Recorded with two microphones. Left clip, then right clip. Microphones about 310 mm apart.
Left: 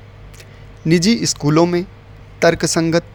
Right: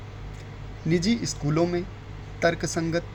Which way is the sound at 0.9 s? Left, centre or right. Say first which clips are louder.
Left 10 dB; left.